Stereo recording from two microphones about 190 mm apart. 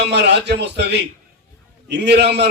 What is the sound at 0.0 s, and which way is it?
A man's voice, 60° right (ahead or behind).